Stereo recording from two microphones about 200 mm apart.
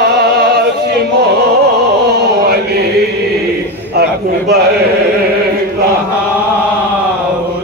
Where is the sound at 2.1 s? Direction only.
55° right (ahead or behind).